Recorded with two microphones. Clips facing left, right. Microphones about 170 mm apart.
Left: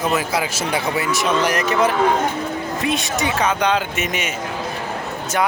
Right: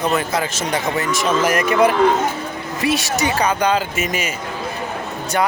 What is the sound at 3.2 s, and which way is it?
A man's voice, centre (ahead or behind).